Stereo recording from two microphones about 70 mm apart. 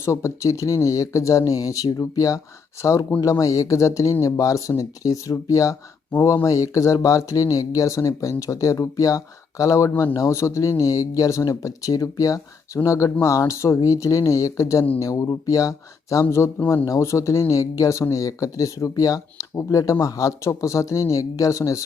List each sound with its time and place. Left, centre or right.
0.0 s speech: left
16.6 s speech: left
16.8 s speech: left